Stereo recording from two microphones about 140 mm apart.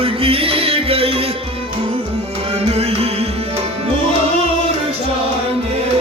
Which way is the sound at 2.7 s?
45° right (ahead or behind).